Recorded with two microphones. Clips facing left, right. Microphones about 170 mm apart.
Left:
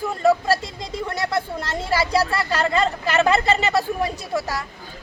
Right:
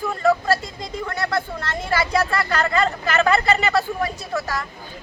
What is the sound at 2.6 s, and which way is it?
Speech, 25° left (ahead or behind).